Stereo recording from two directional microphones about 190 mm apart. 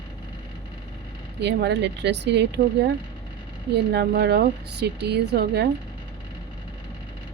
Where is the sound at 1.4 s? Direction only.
65° right (ahead or behind).